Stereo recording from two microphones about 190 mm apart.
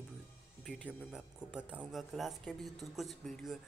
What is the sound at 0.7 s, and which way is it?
Speech, centre (ahead or behind).